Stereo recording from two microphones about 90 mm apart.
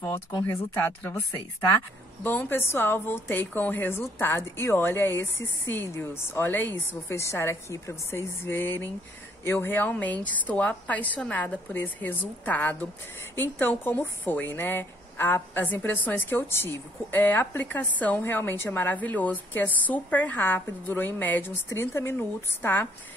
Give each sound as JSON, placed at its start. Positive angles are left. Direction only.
{"t": 0.5, "sound": "a woman's voice", "side_deg": 20}